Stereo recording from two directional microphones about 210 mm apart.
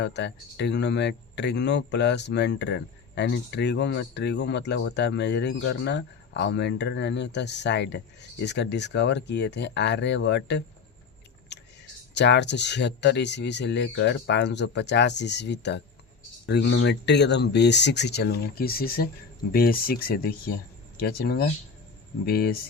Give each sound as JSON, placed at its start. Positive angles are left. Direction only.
{"t": 0.0, "sound": "speech", "side_deg": 55}
{"t": 11.5, "sound": "a sound", "side_deg": 55}
{"t": 12.1, "sound": "speech", "side_deg": 55}